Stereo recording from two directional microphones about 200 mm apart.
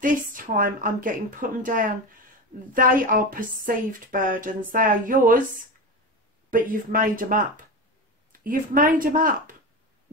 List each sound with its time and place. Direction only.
0.0 s a woman's voice: 45° right (ahead or behind)
6.5 s a woman's voice: 45° right (ahead or behind)